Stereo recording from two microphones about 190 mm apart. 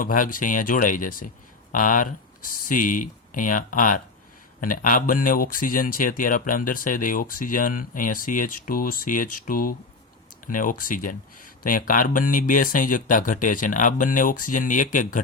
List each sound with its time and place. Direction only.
0.0 s speech: 45° left (ahead or behind)